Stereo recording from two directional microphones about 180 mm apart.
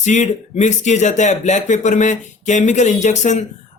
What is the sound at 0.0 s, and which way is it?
A man's voice, 40° left (ahead or behind).